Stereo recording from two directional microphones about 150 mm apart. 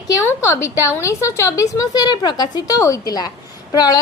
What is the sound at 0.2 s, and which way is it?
A woman's voice, 15° left (ahead or behind).